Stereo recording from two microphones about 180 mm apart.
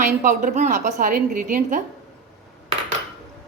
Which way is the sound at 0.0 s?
50° right (ahead or behind).